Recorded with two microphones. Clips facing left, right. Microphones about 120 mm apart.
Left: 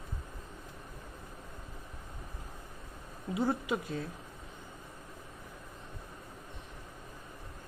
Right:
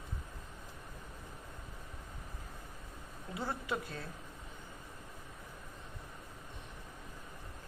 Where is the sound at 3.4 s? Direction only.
15° left (ahead or behind).